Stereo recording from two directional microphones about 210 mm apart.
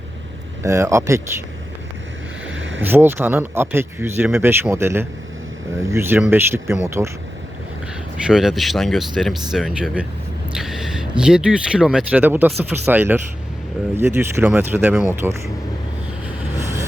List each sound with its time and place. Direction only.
0.6 s speech: 15° right (ahead or behind)
2.6 s a sound: 65° right (ahead or behind)
2.8 s speech: 10° right (ahead or behind)
8.3 s speech: centre (ahead or behind)
10.6 s a sound: centre (ahead or behind)
11.2 s speech: 5° right (ahead or behind)